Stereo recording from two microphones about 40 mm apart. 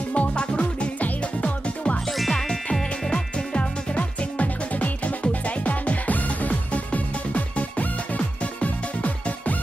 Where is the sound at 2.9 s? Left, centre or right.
Left.